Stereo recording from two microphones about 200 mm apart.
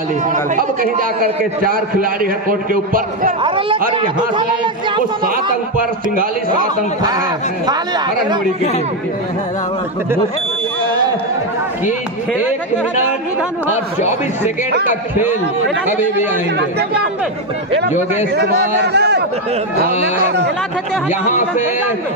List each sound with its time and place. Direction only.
0.3 s a man's voice: 45° right (ahead or behind)
3.4 s a man's voice: 25° right (ahead or behind)
5.2 s a man's voice: 45° right (ahead or behind)
7.0 s a man's voice: 20° right (ahead or behind)
12.4 s speech: 10° right (ahead or behind)
18.3 s a man's voice: 55° right (ahead or behind)
21.1 s speech: 35° left (ahead or behind)